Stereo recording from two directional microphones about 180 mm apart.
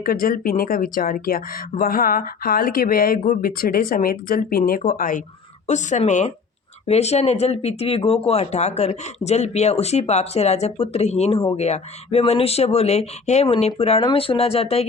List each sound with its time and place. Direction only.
0.0 s speech: 55° left (ahead or behind); by 14.8 s 35° left (ahead or behind)